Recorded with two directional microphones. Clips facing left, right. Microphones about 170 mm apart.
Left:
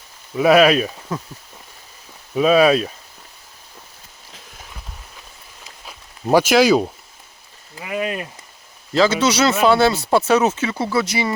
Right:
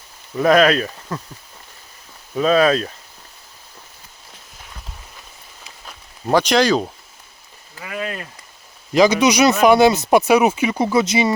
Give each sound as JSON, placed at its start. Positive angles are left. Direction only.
{"t": 0.3, "sound": "speech", "side_deg": 10}
{"t": 2.3, "sound": "speech", "side_deg": 10}
{"t": 5.8, "sound": "speech", "side_deg": 5}
{"t": 7.8, "sound": "speech", "side_deg": 20}
{"t": 8.9, "sound": "a man's voice", "side_deg": -15}